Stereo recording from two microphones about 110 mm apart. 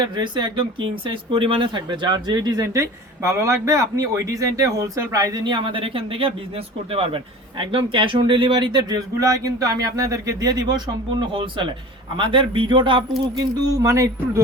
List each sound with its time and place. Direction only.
0.0 s speech: 45° right (ahead or behind)
9.2 s speech: 30° right (ahead or behind)
12.1 s speech: 50° right (ahead or behind)
13.7 s speech: 30° right (ahead or behind)